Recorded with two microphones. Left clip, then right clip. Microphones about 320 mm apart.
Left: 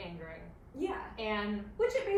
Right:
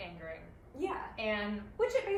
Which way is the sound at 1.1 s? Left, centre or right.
Centre.